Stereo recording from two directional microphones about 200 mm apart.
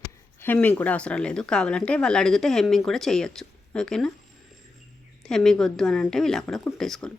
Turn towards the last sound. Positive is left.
turn(degrees=5)  # may be behind; listen again after turning